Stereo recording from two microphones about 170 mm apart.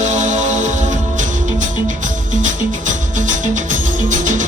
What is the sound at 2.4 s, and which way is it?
Music, 50° right (ahead or behind).